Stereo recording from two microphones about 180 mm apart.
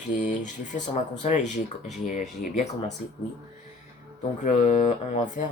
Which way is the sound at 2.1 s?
40° left (ahead or behind).